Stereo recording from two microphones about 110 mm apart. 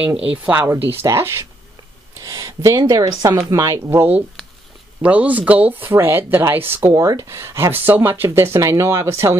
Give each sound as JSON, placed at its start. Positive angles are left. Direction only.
{"t": 0.6, "sound": "a woman's voice", "side_deg": -25}